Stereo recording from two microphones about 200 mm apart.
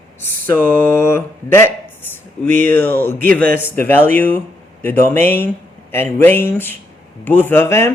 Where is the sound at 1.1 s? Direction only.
10° left (ahead or behind).